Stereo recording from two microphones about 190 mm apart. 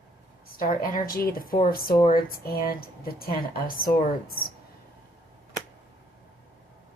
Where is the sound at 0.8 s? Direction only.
50° left (ahead or behind).